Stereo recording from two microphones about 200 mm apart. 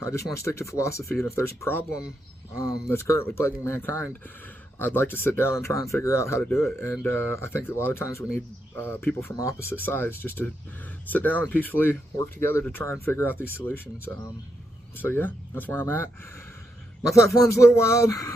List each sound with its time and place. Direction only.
0.0 s speech: 15° left (ahead or behind)
2.9 s speech: 10° left (ahead or behind)
14.9 s speech: 10° left (ahead or behind)
17.1 s speech: 15° left (ahead or behind)